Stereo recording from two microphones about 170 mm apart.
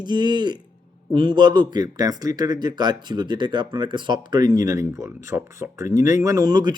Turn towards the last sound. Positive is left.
turn(degrees=-25)  # may be behind; listen again after turning